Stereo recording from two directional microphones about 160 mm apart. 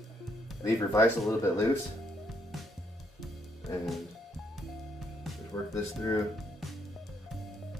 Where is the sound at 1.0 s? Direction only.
15° left (ahead or behind).